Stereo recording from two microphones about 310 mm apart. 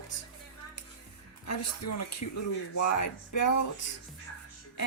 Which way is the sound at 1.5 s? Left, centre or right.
Left.